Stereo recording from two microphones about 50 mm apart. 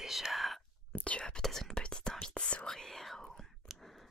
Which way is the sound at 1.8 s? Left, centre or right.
Centre.